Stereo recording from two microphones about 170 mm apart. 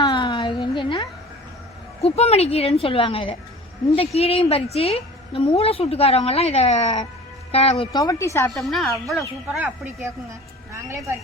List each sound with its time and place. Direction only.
0.0 s a sound: 25° left (ahead or behind)
2.0 s a woman's voice: 35° left (ahead or behind)
7.9 s a woman's voice: 20° left (ahead or behind)
8.5 s speech: centre (ahead or behind); by 11.1 s 15° right (ahead or behind)